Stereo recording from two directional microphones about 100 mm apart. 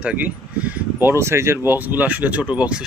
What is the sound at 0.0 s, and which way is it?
Speech, 10° right (ahead or behind).